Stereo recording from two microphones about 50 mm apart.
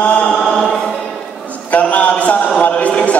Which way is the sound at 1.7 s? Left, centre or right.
Left.